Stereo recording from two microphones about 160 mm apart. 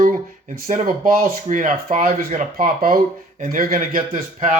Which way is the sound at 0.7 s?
50° right (ahead or behind).